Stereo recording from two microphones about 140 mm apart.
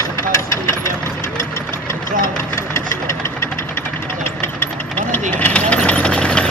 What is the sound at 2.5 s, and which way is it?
Engine, 20° left (ahead or behind).